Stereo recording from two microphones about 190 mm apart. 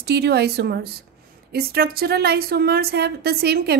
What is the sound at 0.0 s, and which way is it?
Speech, 60° right (ahead or behind).